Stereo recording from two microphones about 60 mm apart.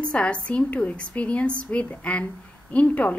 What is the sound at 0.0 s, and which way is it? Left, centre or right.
A woman's voice, centre.